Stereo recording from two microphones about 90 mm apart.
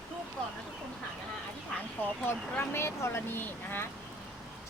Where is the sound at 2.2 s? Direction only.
25° left (ahead or behind).